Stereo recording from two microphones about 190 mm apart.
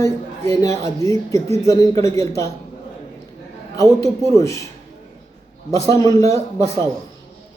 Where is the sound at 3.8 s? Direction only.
15° left (ahead or behind).